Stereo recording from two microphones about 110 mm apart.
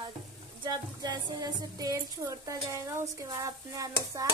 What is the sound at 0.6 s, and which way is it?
A woman's voice, 40° right (ahead or behind).